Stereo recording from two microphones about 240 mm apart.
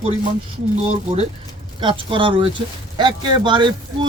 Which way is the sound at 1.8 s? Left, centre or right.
Right.